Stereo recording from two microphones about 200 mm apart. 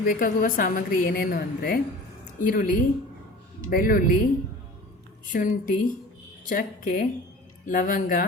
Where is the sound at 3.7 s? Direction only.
45° left (ahead or behind).